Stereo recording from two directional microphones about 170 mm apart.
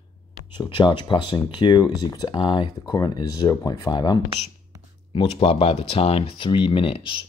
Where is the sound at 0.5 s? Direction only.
25° left (ahead or behind).